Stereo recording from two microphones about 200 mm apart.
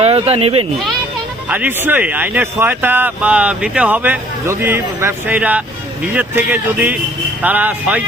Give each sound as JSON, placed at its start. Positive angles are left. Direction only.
{"t": 0.0, "sound": "speech", "side_deg": -30}
{"t": 1.5, "sound": "speech", "side_deg": -10}